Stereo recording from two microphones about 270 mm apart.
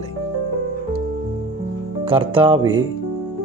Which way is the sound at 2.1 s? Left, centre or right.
Centre.